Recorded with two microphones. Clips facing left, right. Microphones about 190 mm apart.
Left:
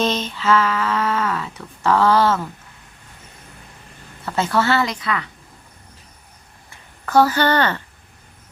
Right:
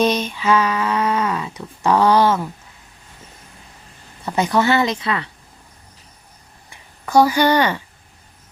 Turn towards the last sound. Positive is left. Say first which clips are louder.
# right 2 dB
turn(degrees=-10)  # may be behind; listen again after turning